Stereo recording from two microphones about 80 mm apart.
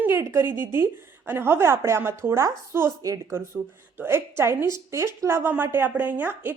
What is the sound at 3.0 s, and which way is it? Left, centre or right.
Speech, right.